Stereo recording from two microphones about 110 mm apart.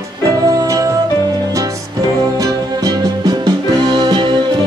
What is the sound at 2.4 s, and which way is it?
Music, 35° right (ahead or behind).